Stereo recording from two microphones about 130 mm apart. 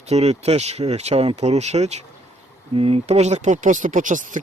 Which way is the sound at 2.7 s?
50° right (ahead or behind).